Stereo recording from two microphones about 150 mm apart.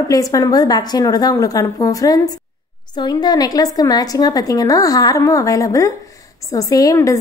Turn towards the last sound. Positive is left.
turn(degrees=20)  # may be behind; listen again after turning